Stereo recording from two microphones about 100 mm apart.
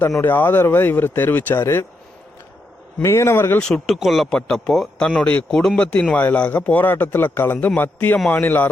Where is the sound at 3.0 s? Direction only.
25° left (ahead or behind).